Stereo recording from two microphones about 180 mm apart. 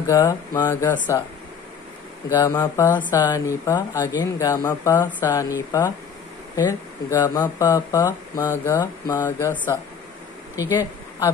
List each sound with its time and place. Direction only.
0.0 s speech: 15° left (ahead or behind)
2.2 s speech: 20° left (ahead or behind)
10.6 s speech: 20° left (ahead or behind)